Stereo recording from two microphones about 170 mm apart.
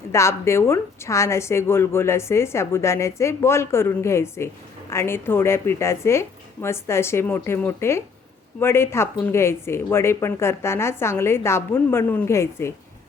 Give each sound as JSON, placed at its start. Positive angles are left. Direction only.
{"t": 0.1, "sound": "a woman's voice", "side_deg": 15}